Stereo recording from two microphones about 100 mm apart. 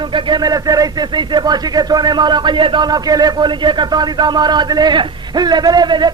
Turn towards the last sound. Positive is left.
turn(degrees=-45)  # may be behind; listen again after turning